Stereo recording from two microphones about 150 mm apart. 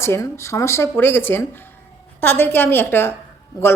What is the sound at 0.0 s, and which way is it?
A woman's voice, 15° left (ahead or behind).